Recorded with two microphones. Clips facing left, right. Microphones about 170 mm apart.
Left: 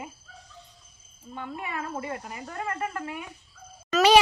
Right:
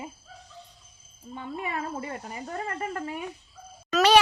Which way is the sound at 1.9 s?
35° right (ahead or behind).